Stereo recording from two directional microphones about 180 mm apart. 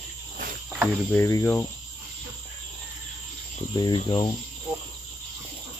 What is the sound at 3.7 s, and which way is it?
Speech, 25° left (ahead or behind).